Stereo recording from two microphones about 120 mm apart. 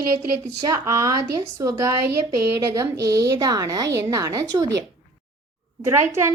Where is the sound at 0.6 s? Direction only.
25° right (ahead or behind).